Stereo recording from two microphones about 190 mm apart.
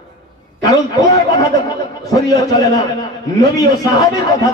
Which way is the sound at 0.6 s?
15° left (ahead or behind).